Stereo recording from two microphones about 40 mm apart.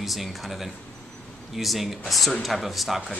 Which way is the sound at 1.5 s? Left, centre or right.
Centre.